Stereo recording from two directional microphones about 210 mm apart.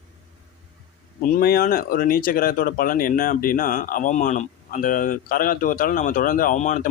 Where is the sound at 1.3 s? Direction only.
45° left (ahead or behind).